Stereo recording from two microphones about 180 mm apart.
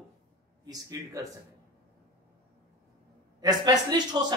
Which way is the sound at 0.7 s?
20° right (ahead or behind).